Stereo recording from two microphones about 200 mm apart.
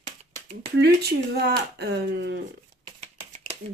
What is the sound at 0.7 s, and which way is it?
Speech, 55° right (ahead or behind).